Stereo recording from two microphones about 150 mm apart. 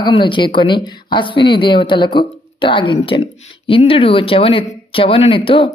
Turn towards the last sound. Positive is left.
turn(degrees=35)  # may be behind; listen again after turning